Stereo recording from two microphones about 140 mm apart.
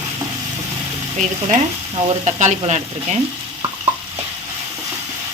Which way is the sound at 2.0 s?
55° right (ahead or behind).